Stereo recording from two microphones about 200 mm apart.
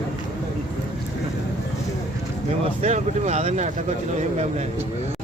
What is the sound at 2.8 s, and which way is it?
Speech, 35° right (ahead or behind).